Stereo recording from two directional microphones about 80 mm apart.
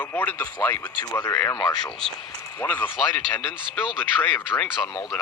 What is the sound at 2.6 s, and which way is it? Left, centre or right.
Speech, left.